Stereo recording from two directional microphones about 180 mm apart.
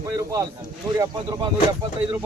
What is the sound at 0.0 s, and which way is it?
Speech, 20° right (ahead or behind).